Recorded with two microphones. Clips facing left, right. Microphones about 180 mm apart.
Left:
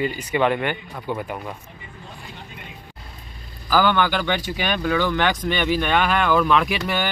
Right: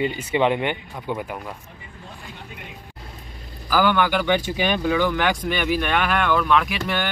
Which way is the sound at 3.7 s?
10° right (ahead or behind).